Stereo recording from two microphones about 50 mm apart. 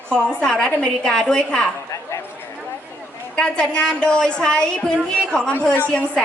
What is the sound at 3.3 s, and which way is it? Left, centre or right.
A woman's voice, centre.